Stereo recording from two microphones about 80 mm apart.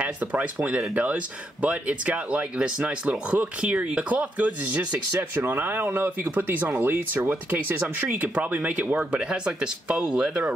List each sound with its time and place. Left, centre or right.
0.0 s speech: centre